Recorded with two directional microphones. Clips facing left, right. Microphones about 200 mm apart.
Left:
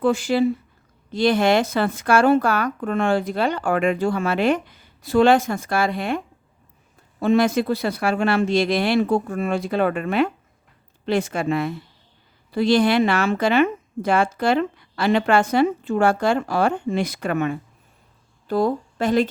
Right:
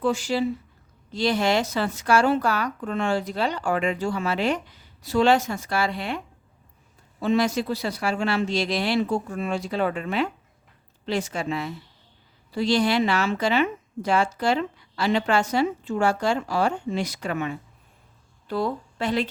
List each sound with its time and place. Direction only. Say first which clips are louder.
0.0 s a woman's voice: left 5 dB; 55° left (ahead or behind)